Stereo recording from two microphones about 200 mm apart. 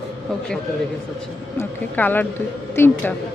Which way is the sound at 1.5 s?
10° left (ahead or behind).